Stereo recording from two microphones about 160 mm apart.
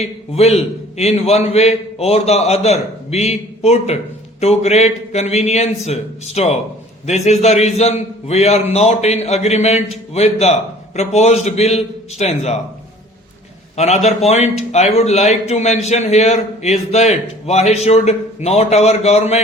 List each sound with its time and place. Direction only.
0.0 s a man's voice: 40° left (ahead or behind)
13.7 s a man's voice: 45° left (ahead or behind)